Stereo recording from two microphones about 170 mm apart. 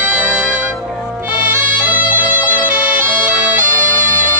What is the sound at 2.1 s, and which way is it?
Bagpipes, 10° right (ahead or behind).